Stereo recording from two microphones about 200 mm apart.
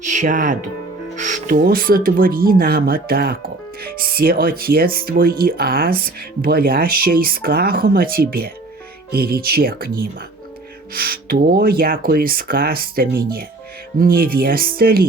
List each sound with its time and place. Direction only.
0.0 s speech: 40° right (ahead or behind)